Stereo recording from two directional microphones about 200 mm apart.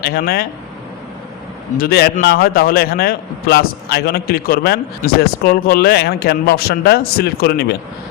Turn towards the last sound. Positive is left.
turn(degrees=50)  # may be behind; listen again after turning